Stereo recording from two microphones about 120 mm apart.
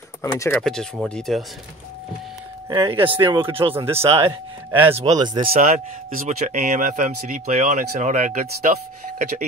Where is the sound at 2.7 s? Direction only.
40° right (ahead or behind).